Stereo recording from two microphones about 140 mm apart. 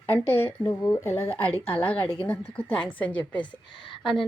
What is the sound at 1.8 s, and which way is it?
A woman's voice, 10° left (ahead or behind).